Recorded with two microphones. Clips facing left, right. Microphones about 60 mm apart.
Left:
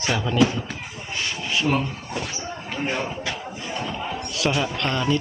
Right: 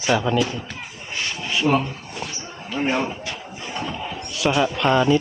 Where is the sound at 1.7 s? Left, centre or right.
Right.